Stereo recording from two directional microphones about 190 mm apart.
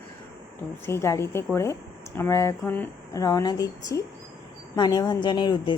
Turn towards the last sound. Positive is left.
turn(degrees=20)  # may be behind; listen again after turning